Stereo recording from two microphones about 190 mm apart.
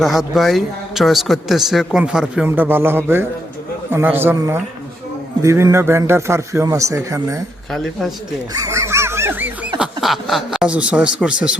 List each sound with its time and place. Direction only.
0.0 s a man's voice: centre (ahead or behind); by 7.4 s 15° right (ahead or behind)
7.7 s a man's voice: centre (ahead or behind)
8.5 s a sound: 15° right (ahead or behind)